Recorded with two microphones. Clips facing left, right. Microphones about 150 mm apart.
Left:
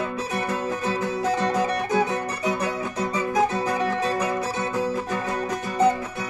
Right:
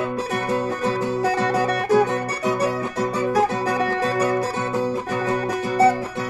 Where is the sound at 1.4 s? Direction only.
65° right (ahead or behind).